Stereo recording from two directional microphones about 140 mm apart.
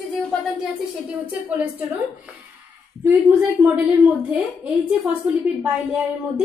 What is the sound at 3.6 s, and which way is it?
A woman's voice, 5° right (ahead or behind).